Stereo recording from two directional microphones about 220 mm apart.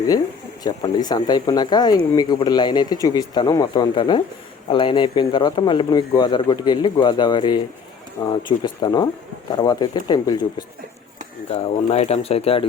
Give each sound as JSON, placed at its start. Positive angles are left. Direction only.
{"t": 0.6, "sound": "speech", "side_deg": 20}